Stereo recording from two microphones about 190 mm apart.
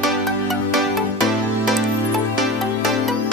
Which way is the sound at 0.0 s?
Centre (ahead or behind).